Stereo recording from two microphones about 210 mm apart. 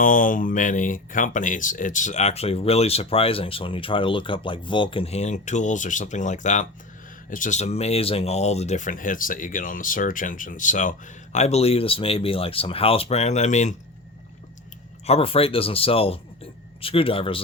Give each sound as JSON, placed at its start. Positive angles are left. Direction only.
{"t": 0.0, "sound": "speech", "side_deg": 40}
{"t": 15.0, "sound": "speech", "side_deg": 30}